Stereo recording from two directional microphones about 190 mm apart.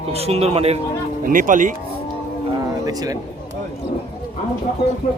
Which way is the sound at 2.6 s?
20° right (ahead or behind).